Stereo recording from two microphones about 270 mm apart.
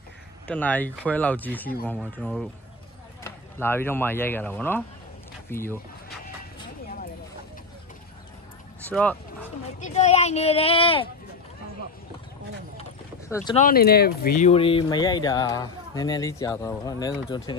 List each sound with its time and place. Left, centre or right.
0.5 s speech: centre
8.8 s bow-wow: centre
9.8 s speech: left
13.5 s speech: left
14.4 s speech: left